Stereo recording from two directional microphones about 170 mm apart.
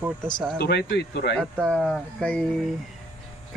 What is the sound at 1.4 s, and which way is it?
Speech, 5° left (ahead or behind).